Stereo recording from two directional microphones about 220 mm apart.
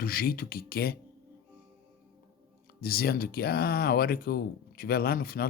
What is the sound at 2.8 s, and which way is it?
Speech, 45° left (ahead or behind).